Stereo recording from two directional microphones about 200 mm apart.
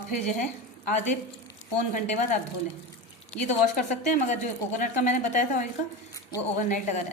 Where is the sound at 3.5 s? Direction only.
35° left (ahead or behind).